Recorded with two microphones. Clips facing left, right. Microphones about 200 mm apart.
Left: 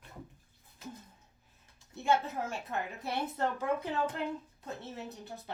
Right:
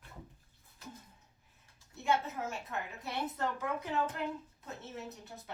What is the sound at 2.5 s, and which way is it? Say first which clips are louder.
A woman's voice: left 4 dB; 30° left (ahead or behind).